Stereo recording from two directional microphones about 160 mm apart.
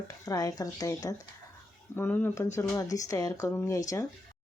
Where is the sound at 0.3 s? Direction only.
20° left (ahead or behind).